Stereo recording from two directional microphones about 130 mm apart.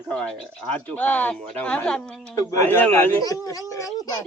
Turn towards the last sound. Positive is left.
turn(degrees=30)  # may be behind; listen again after turning